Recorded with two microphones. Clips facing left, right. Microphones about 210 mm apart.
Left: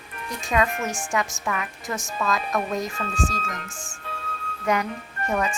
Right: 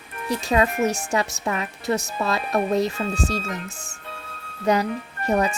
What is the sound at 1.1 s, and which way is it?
A woman's voice, 35° right (ahead or behind).